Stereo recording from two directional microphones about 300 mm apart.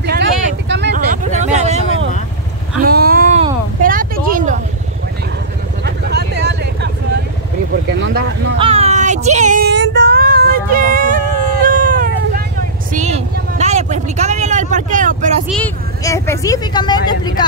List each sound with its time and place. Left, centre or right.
0.0 s vehicle: right
2.8 s a sound: right
5.9 s vehicle: right
7.7 s a sound: right
8.5 s child singing: centre
12.9 s vehicle: right
15.4 s vehicle: centre